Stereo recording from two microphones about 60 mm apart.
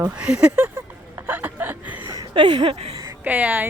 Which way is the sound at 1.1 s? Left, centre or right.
Right.